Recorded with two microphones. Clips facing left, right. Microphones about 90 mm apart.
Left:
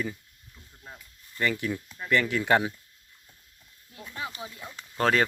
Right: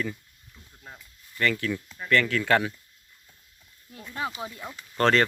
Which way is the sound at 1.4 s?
15° left (ahead or behind).